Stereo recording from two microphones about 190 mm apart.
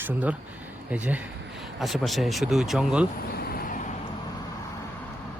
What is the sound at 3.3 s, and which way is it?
Vehicle, 55° left (ahead or behind).